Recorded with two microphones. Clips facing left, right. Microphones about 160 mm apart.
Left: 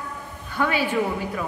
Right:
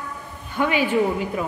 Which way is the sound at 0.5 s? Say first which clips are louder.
Right 3 dB; 15° right (ahead or behind).